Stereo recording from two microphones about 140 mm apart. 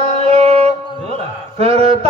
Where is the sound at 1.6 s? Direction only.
45° right (ahead or behind).